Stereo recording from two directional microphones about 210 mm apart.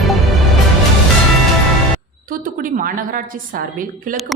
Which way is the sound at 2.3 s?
40° right (ahead or behind).